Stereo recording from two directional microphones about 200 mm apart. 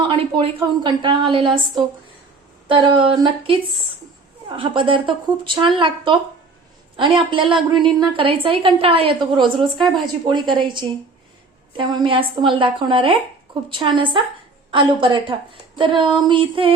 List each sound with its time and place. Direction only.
0.0 s speech: 25° right (ahead or behind)
2.6 s speech: 25° right (ahead or behind)